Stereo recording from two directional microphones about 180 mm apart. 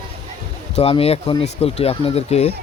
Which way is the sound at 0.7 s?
35° left (ahead or behind).